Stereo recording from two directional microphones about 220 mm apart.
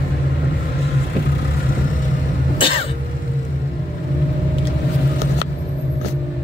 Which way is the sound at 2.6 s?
25° left (ahead or behind).